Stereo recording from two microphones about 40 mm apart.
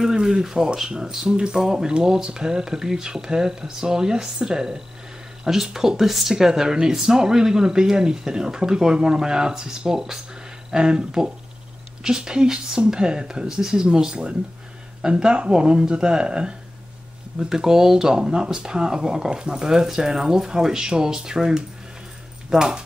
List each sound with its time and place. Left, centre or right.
0.0 s speech: centre
22.5 s speech: centre